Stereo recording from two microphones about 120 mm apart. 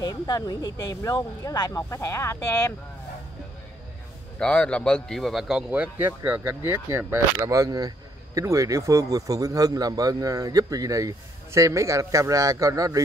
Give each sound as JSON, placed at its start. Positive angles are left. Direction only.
{"t": 0.0, "sound": "speech", "side_deg": 35}
{"t": 4.4, "sound": "a man's voice", "side_deg": 10}